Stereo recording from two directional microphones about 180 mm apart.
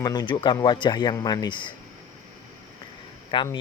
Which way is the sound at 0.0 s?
25° left (ahead or behind).